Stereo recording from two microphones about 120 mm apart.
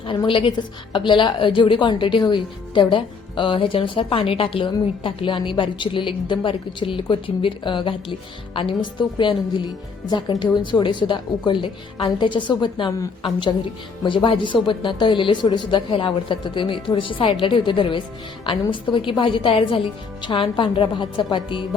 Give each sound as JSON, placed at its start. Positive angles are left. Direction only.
{"t": 0.3, "sound": "a woman's voice", "side_deg": 45}
{"t": 14.0, "sound": "a woman's voice", "side_deg": 45}